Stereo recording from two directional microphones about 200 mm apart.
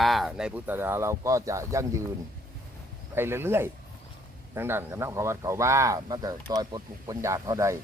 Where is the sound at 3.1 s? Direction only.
10° right (ahead or behind).